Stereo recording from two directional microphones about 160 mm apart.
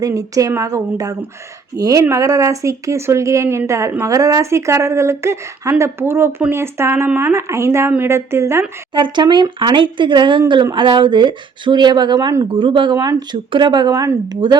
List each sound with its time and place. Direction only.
0.0 s speech: 20° right (ahead or behind)
8.9 s speech: 30° right (ahead or behind)